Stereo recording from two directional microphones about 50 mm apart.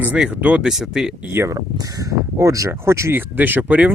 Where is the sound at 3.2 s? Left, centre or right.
Right.